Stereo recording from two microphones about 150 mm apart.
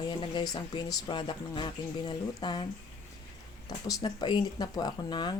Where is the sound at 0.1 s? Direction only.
30° left (ahead or behind).